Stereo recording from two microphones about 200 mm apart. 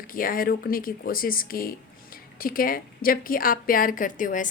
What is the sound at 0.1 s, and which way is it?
A woman's voice, 45° left (ahead or behind).